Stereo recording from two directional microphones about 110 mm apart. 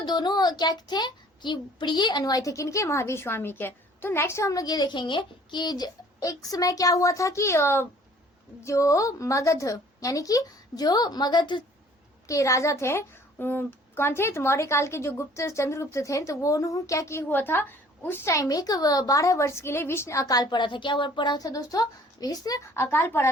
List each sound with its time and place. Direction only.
0.0 s a child's voice: 40° left (ahead or behind)
12.3 s a woman's voice: 30° left (ahead or behind)
22.7 s a woman's voice: 20° left (ahead or behind)